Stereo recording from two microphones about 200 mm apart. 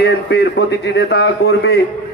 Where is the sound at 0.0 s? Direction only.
55° left (ahead or behind).